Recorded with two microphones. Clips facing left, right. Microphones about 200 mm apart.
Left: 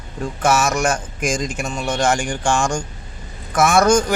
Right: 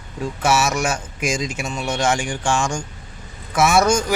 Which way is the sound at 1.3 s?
50° left (ahead or behind).